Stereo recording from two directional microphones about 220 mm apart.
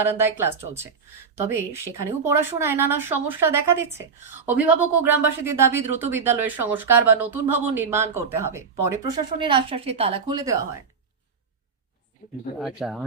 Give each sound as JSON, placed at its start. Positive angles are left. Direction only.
{"t": 0.0, "sound": "speech", "side_deg": -10}
{"t": 2.2, "sound": "speech", "side_deg": -10}
{"t": 12.5, "sound": "speech", "side_deg": 0}